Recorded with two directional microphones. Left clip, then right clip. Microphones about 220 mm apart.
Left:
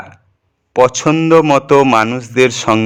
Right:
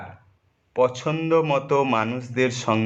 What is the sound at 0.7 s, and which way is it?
A man's voice, 45° left (ahead or behind).